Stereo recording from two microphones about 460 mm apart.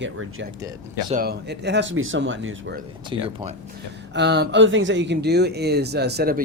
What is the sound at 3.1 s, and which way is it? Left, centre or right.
Speech, centre.